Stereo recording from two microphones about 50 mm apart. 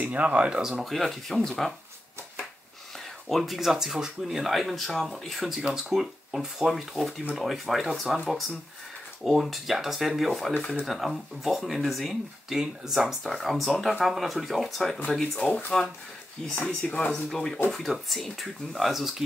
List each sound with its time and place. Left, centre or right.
0.0 s speech: right
0.6 s speech: centre
3.3 s speech: centre
9.2 s speech: centre
17.6 s speech: centre